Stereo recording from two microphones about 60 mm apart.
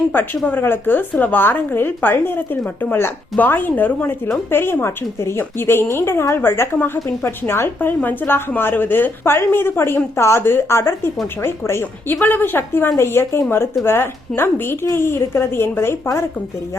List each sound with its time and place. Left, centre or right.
0.1 s a woman's voice: left
4.5 s a woman's voice: left